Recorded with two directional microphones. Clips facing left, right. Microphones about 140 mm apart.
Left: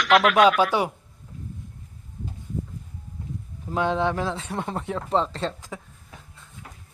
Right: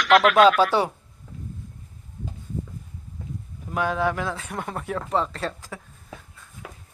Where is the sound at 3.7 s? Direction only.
25° left (ahead or behind).